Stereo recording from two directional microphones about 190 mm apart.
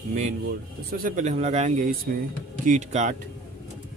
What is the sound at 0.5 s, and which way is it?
Speech, 50° right (ahead or behind).